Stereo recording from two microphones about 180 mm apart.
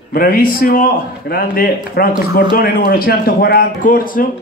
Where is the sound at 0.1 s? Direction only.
55° left (ahead or behind).